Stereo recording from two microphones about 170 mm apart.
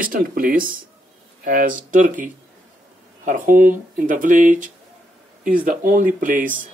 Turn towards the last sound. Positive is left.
turn(degrees=-50)  # may be behind; listen again after turning